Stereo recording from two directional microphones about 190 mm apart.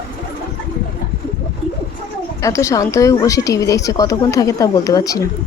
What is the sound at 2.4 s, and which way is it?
A woman's voice, 15° left (ahead or behind).